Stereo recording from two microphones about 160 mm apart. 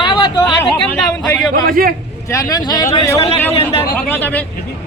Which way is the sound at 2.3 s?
20° left (ahead or behind).